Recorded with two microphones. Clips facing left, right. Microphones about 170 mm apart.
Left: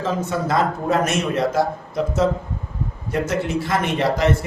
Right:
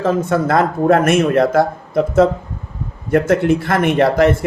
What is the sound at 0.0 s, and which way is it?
Speech, 50° right (ahead or behind).